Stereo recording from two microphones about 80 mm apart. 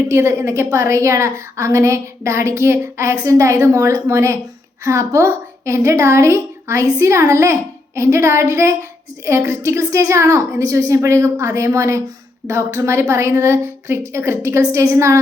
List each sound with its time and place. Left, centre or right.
0.1 s a woman's voice: right